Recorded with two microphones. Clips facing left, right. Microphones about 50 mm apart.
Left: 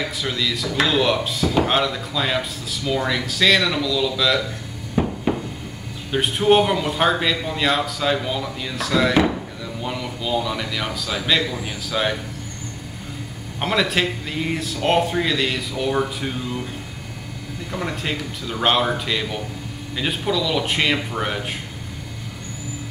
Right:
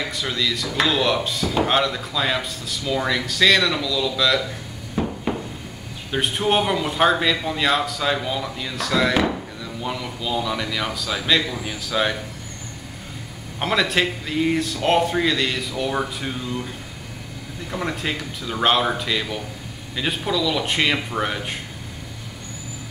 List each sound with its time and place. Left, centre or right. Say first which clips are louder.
0.2 s speech: right 1 dB; centre
4.9 s a sound: left 3 dB; centre
6.1 s speech: left 4 dB; centre
13.6 s speech: even; centre
17.6 s speech: even; centre